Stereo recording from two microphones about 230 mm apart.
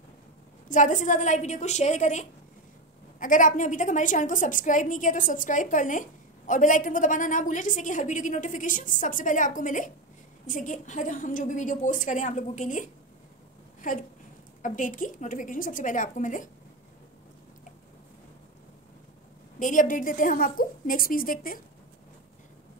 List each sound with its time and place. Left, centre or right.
0.7 s a woman's voice: left
13.7 s a sound: left
14.6 s a woman's voice: left
19.6 s a woman's voice: left